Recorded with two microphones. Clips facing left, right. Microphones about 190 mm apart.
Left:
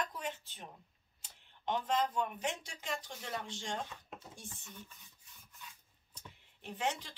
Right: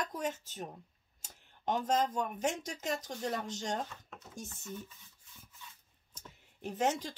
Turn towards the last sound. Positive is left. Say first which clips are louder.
# right 6 dB
turn(degrees=-45)  # may be behind; listen again after turning